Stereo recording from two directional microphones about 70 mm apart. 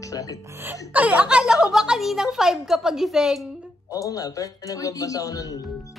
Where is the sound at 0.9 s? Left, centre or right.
Centre.